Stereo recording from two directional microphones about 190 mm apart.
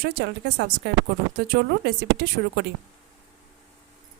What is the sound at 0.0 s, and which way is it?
A woman's voice, 60° right (ahead or behind).